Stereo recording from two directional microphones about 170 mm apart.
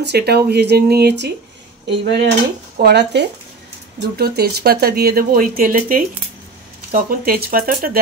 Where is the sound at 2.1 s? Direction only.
90° right.